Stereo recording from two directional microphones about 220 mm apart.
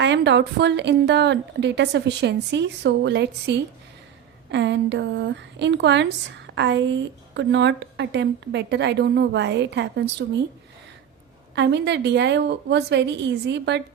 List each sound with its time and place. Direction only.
0.0 s speech: 55° right (ahead or behind)
4.5 s speech: 55° right (ahead or behind)
11.5 s speech: 50° right (ahead or behind)